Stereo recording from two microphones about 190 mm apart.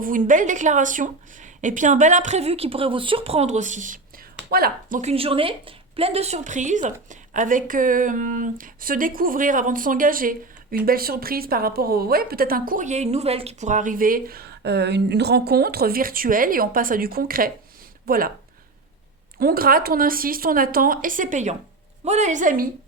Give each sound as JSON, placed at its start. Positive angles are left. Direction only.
{"t": 0.0, "sound": "a woman's voice", "side_deg": -45}
{"t": 19.4, "sound": "a woman's voice", "side_deg": -50}